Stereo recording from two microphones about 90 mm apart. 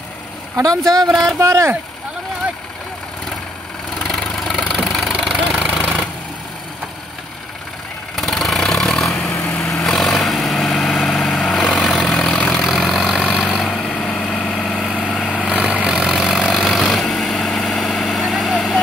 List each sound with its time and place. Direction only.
0.6 s speech: 40° right (ahead or behind)
4.0 s vehicle: 5° left (ahead or behind)
4.6 s engine: centre (ahead or behind)
8.2 s vehicle: centre (ahead or behind)
12.6 s vehicle: centre (ahead or behind)
13.7 s vehicle: 10° left (ahead or behind)
15.4 s vehicle: 15° right (ahead or behind)